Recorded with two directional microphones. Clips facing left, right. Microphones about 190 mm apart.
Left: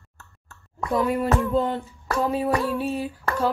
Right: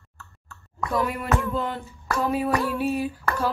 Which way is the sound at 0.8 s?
25° left (ahead or behind).